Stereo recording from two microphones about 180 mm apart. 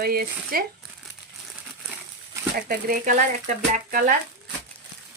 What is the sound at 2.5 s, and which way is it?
Speech, 55° right (ahead or behind).